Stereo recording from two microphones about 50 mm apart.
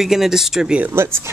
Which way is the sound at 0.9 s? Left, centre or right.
Right.